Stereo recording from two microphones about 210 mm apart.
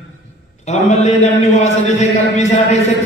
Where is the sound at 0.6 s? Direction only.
30° left (ahead or behind).